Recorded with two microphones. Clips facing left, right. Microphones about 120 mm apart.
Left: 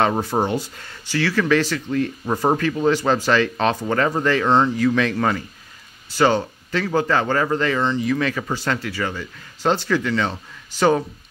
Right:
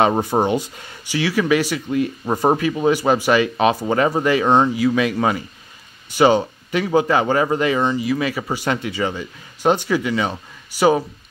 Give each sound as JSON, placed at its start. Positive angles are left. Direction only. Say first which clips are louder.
{"t": 0.0, "sound": "speech", "louder": "right 3 dB", "side_deg": -15}